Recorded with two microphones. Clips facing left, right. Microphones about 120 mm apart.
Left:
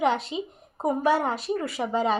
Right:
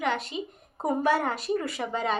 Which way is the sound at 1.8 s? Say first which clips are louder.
Left 4 dB; 10° left (ahead or behind).